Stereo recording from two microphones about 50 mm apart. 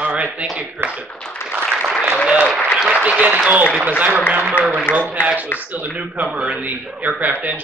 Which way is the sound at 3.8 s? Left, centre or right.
Right.